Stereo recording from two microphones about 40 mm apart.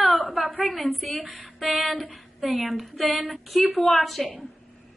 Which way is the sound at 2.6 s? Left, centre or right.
Centre.